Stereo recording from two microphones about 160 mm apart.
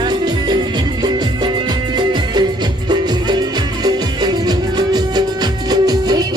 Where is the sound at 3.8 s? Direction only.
25° right (ahead or behind).